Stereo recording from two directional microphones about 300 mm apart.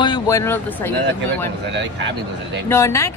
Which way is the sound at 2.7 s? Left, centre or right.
Centre.